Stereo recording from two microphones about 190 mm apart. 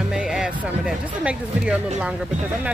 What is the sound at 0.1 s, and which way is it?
Speech, 5° right (ahead or behind).